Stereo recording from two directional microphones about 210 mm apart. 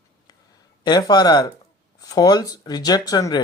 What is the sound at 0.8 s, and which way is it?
Speech, 20° left (ahead or behind).